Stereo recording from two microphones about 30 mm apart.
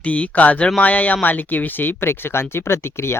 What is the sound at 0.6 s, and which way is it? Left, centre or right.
Speech, left.